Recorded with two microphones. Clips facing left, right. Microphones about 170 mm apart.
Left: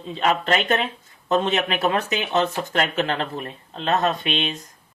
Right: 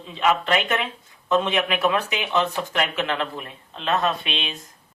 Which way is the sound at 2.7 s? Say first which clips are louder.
Left 2 dB; 40° left (ahead or behind).